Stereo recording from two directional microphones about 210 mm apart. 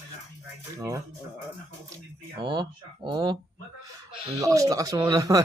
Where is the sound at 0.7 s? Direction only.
15° right (ahead or behind).